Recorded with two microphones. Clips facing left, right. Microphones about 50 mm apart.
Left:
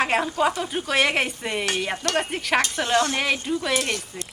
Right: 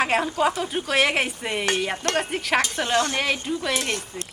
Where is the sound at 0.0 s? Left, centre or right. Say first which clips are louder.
Even; centre.